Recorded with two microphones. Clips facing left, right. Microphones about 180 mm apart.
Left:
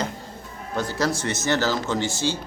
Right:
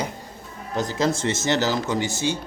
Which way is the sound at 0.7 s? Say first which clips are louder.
Right 2 dB; 20° right (ahead or behind).